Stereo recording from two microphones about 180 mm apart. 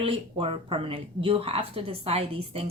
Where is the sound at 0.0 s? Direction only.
30° right (ahead or behind).